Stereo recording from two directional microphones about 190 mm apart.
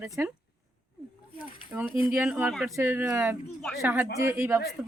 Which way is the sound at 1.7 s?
10° right (ahead or behind).